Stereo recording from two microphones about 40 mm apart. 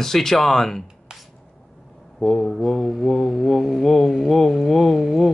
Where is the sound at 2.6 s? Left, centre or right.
Centre.